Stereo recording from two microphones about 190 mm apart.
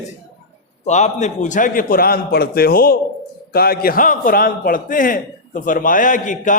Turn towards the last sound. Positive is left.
turn(degrees=45)  # may be behind; listen again after turning